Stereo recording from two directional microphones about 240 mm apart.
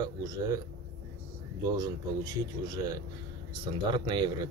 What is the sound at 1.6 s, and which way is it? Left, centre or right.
Speech, centre.